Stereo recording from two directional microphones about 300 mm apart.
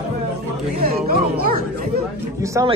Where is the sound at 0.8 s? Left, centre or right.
Right.